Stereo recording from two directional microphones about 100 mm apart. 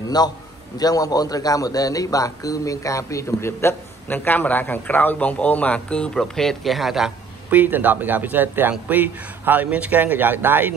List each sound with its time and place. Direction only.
0.2 s a man's voice: 40° left (ahead or behind); by 7.1 s centre (ahead or behind)
7.4 s a man's voice: 20° right (ahead or behind)